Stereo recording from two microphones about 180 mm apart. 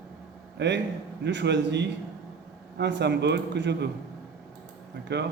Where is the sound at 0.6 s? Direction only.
75° right (ahead or behind).